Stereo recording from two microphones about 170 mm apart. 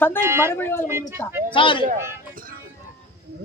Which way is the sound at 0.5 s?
15° left (ahead or behind).